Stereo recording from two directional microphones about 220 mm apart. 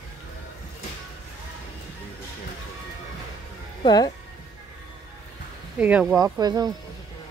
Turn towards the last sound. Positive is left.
turn(degrees=-15)  # may be behind; listen again after turning